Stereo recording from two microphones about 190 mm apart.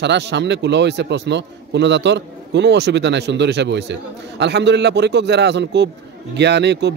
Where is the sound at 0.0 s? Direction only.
65° right (ahead or behind).